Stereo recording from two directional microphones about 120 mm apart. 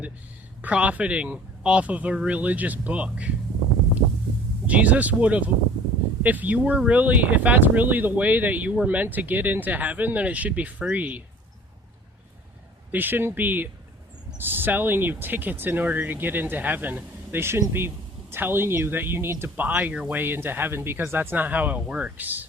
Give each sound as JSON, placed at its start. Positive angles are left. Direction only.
{"t": 0.6, "sound": "speech", "side_deg": -10}
{"t": 4.6, "sound": "speech", "side_deg": -10}
{"t": 12.9, "sound": "speech", "side_deg": -15}